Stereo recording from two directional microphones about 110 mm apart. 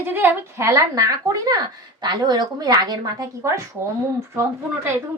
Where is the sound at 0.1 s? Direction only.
20° right (ahead or behind); by 3.2 s 40° right (ahead or behind).